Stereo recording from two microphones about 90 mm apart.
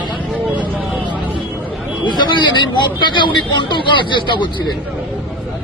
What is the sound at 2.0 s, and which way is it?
A man's voice, 55° left (ahead or behind).